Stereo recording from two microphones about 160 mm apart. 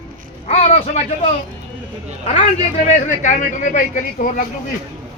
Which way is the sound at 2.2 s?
45° left (ahead or behind).